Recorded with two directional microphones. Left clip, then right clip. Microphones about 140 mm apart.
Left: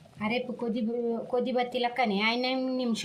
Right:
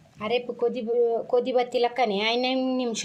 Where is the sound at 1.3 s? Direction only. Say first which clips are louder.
Right 5 dB; 45° right (ahead or behind).